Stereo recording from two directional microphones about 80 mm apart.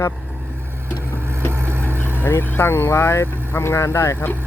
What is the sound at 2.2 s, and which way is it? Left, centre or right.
Speech, left.